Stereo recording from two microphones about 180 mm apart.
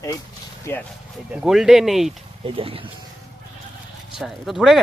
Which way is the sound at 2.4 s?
30° right (ahead or behind).